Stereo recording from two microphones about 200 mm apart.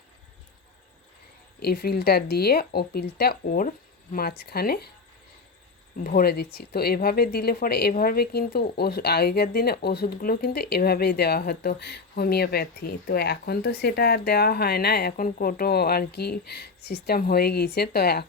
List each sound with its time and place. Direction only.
1.5 s a woman's voice: 50° left (ahead or behind)
6.0 s a woman's voice: 45° left (ahead or behind)